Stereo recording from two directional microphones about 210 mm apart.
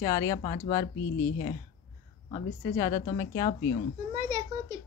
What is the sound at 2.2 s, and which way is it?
Speech, 15° left (ahead or behind).